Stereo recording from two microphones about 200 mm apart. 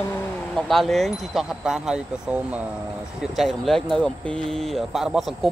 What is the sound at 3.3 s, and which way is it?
Speech, centre (ahead or behind).